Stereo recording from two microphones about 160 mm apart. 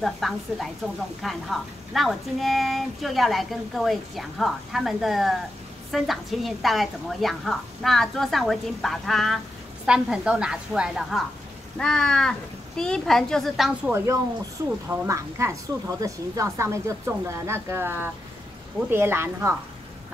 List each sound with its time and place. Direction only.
0.0 s speech: centre (ahead or behind)
13.9 s a woman's voice: 15° right (ahead or behind)